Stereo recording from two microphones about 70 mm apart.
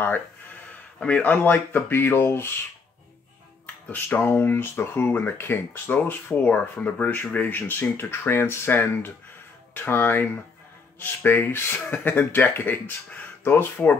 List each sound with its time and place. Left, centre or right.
0.7 s speech: centre; by 2.5 s left
3.6 s speech: left